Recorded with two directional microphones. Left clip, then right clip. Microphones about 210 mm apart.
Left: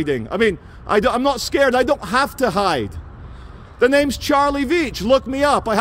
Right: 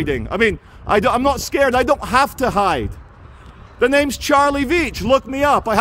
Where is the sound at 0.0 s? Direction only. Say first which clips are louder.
Right 1 dB; 5° right (ahead or behind).